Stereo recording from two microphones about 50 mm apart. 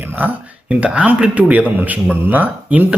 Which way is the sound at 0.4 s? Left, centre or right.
Right.